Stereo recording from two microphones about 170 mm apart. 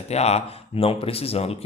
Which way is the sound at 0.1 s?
40° left (ahead or behind).